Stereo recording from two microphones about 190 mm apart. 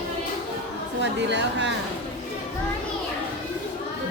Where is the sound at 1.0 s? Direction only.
70° right (ahead or behind).